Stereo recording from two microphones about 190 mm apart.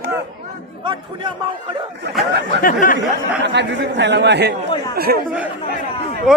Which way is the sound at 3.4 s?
65° right (ahead or behind).